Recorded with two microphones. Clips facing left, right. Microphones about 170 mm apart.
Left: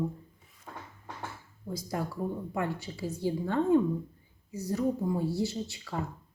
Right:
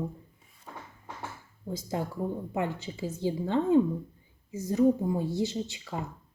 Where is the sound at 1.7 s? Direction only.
25° right (ahead or behind).